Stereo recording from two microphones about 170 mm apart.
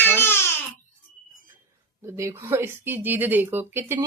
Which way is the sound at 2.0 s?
15° right (ahead or behind).